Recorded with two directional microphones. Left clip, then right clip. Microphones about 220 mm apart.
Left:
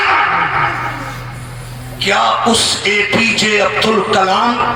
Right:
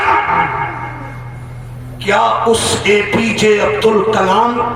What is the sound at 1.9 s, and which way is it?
A man's voice, 40° right (ahead or behind).